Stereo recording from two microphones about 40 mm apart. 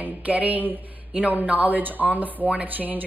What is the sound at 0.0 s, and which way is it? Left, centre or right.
Speech, right.